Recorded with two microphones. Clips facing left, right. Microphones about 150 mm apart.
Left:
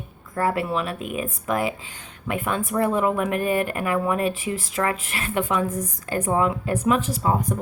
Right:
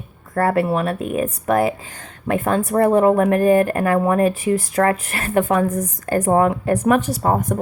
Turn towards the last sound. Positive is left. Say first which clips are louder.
# right 4 dB
turn(degrees=-50)  # may be behind; listen again after turning